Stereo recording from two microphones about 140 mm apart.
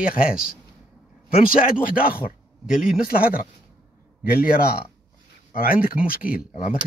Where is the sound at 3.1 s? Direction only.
90° left.